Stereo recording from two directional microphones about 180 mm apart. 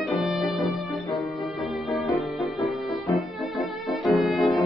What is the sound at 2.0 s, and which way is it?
Music, centre (ahead or behind).